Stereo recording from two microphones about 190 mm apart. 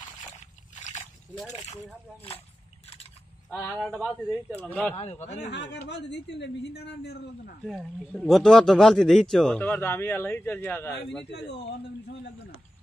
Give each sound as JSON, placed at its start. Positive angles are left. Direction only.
{"t": 0.7, "sound": "splash", "side_deg": 40}
{"t": 3.4, "sound": "speech", "side_deg": 0}
{"t": 4.6, "sound": "speech", "side_deg": 10}
{"t": 4.9, "sound": "speech", "side_deg": 35}
{"t": 5.5, "sound": "speech", "side_deg": 60}
{"t": 7.6, "sound": "speech", "side_deg": 0}
{"t": 11.2, "sound": "speech", "side_deg": 60}